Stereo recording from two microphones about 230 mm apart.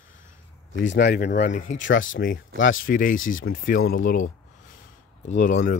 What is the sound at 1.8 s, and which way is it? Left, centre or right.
Speech, left.